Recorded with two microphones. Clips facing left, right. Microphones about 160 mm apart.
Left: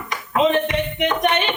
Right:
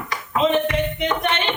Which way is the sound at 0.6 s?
15° left (ahead or behind).